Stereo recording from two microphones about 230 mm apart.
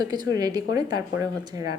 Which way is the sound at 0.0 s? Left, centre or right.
Centre.